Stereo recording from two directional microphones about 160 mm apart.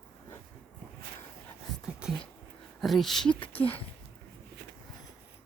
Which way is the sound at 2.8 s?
Centre (ahead or behind).